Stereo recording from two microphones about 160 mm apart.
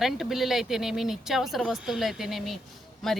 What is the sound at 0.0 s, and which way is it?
A woman's voice, centre (ahead or behind).